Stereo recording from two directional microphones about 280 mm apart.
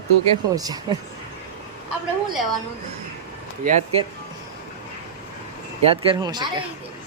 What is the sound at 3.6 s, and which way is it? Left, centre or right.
Speech, right.